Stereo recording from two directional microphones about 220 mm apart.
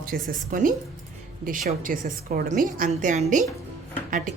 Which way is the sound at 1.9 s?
40° right (ahead or behind).